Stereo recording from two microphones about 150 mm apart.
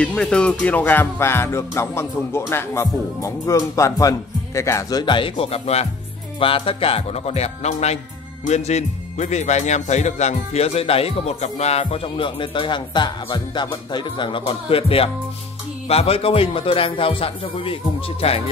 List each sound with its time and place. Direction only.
0.0 s music: 5° left (ahead or behind); by 8.0 s 45° left (ahead or behind)
8.5 s speech: 45° left (ahead or behind)